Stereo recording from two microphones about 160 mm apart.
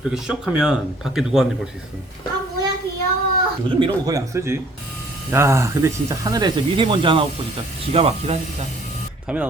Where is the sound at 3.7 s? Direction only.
25° right (ahead or behind).